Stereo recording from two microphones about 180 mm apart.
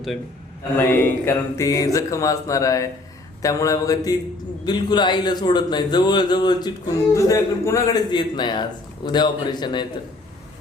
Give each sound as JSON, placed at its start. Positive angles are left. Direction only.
{"t": 0.8, "sound": "a man's voice", "side_deg": 10}